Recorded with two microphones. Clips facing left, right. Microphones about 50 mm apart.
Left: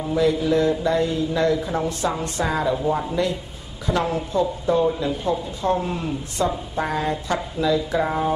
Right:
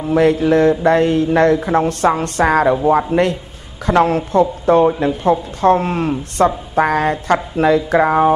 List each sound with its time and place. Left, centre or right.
0.1 s a man's voice: right